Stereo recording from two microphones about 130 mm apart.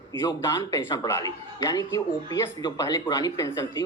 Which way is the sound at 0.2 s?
25° left (ahead or behind).